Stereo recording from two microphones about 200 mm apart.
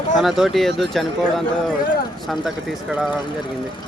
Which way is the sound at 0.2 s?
Centre (ahead or behind).